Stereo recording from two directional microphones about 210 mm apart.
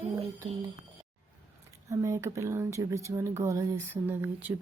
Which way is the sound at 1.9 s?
15° right (ahead or behind).